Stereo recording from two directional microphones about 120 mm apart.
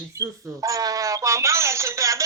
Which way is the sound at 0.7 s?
30° right (ahead or behind).